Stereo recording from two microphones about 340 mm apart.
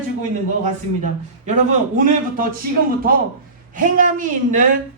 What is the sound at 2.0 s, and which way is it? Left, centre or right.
Speech, right.